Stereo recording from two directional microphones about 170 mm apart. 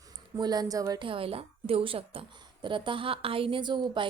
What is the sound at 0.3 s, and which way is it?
A woman's voice, 25° right (ahead or behind).